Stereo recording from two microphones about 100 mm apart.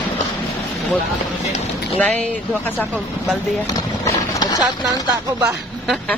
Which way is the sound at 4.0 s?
35° left (ahead or behind).